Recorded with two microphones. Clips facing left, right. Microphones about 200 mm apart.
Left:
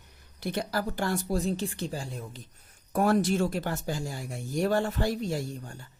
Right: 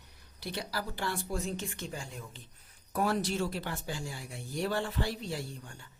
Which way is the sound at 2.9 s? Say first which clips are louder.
Left 6 dB; 50° left (ahead or behind).